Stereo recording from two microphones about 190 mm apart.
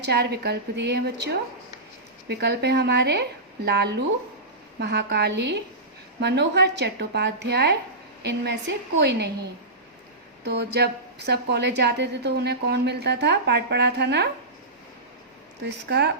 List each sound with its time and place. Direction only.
0.0 s a woman's voice: 60° right (ahead or behind)
10.4 s a woman's voice: 65° right (ahead or behind)
15.9 s a woman's voice: 60° right (ahead or behind)